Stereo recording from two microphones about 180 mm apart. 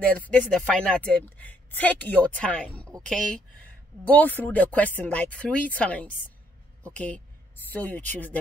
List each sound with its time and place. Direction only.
0.0 s speech: 5° left (ahead or behind)